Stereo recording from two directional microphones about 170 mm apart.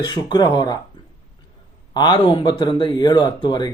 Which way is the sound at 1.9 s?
25° left (ahead or behind).